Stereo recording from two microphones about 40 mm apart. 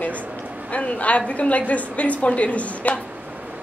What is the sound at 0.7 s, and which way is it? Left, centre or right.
A woman's voice, left.